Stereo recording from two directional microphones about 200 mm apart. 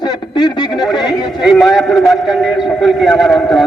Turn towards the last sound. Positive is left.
turn(degrees=0)  # may be behind; listen again after turning